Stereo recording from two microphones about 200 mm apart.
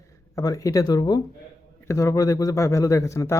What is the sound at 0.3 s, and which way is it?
Speech, 15° left (ahead or behind).